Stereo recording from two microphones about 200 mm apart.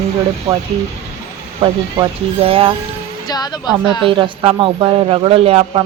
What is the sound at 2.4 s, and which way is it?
Speech, 30° right (ahead or behind).